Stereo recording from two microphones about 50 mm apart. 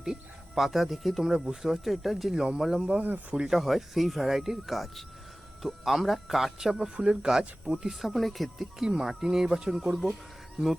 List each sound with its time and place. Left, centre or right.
0.0 s speech: centre
2.3 s speech: centre
3.0 s speech: right
3.5 s speech: centre
8.1 s speech: centre